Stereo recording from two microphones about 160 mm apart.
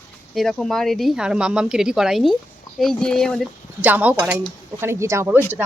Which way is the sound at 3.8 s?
10° right (ahead or behind).